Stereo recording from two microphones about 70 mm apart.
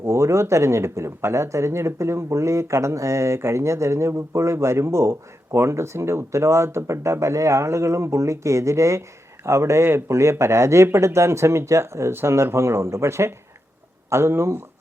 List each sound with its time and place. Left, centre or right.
0.0 s speech: right